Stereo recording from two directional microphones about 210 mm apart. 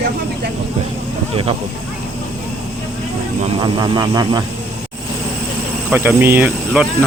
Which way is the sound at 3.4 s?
20° right (ahead or behind).